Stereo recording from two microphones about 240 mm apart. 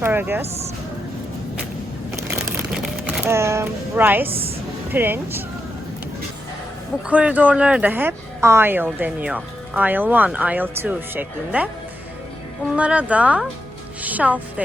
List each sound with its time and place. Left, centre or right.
0.0 s speech: centre
2.1 s a sound: centre
3.2 s speech: centre
4.3 s a woman's voice: right
4.9 s speech: centre
7.1 s speech: centre
12.7 s speech: centre